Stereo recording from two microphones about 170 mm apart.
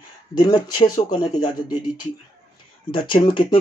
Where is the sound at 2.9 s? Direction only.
30° left (ahead or behind).